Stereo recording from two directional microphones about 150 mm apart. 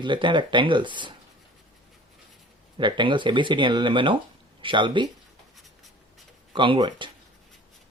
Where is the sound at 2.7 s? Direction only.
35° right (ahead or behind).